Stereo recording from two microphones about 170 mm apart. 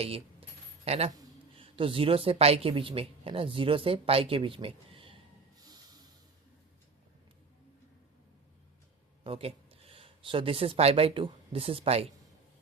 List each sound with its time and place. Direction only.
0.0 s speech: 35° right (ahead or behind)
1.1 s a sound: 20° right (ahead or behind)
1.6 s speech: 30° right (ahead or behind)
5.5 s snort: 20° right (ahead or behind)
9.2 s speech: 35° right (ahead or behind)